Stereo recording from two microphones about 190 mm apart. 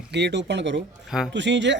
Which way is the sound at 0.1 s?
65° right (ahead or behind).